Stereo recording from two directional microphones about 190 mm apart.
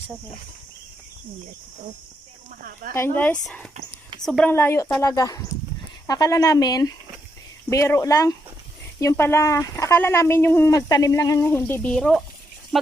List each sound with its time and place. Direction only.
2.6 s speech: 50° right (ahead or behind)
3.4 s speech: 5° left (ahead or behind)